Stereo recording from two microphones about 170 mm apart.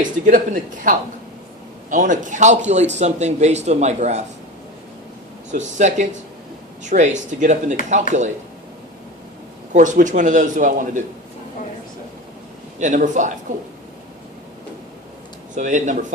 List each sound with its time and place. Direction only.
0.0 s a man's voice: 50° right (ahead or behind)
5.5 s a man's voice: 45° right (ahead or behind)
9.7 s a man's voice: 50° right (ahead or behind)
12.8 s a man's voice: 50° right (ahead or behind)
15.5 s a man's voice: 45° right (ahead or behind)